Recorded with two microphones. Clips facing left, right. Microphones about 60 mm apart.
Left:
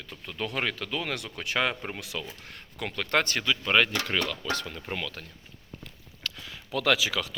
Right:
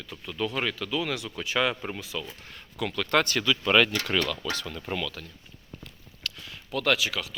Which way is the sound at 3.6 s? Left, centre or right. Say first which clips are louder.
Right 2 dB; centre.